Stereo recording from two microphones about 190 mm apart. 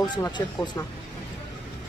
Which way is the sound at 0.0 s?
20° left (ahead or behind).